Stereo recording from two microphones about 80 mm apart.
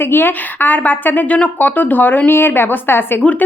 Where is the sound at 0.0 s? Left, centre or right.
Left.